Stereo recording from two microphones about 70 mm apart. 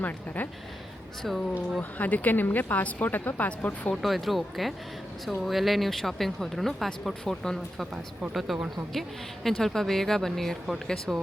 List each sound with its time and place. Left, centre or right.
0.4 s a woman's voice: left
1.2 s speech: centre
1.8 s a woman's voice: left
4.0 s speech: centre